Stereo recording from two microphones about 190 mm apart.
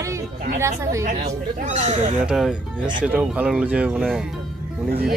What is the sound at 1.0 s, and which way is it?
Speech, 40° right (ahead or behind).